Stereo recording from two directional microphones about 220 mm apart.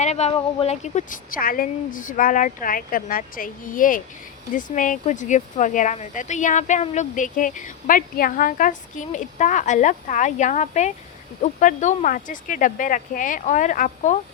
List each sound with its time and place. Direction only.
0.0 s speech: 30° left (ahead or behind)